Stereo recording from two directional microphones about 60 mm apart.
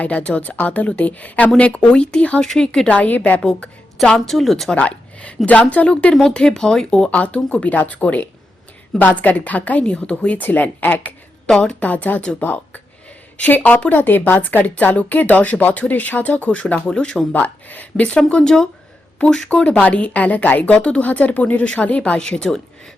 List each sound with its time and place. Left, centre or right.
0.0 s a woman's voice: left
2.4 s speech: centre
2.8 s a woman's voice: left
4.3 s speech: centre
4.7 s a woman's voice: left
11.4 s speech: centre
11.8 s a woman's voice: left
17.3 s a woman's voice: left